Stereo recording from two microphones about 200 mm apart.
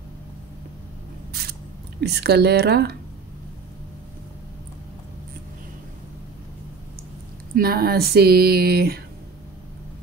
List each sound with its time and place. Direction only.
2.0 s speech: 55° right (ahead or behind)
7.5 s speech: 50° right (ahead or behind)